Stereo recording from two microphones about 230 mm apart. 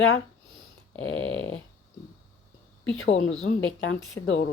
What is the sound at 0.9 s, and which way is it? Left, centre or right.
Speech, centre.